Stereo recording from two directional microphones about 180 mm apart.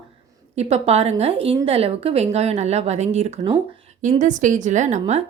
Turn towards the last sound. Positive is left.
turn(degrees=-40)  # may be behind; listen again after turning